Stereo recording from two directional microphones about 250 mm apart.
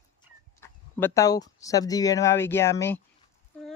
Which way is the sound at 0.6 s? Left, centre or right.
Centre.